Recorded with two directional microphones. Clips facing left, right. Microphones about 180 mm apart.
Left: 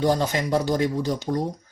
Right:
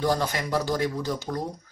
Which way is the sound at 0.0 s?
20° left (ahead or behind).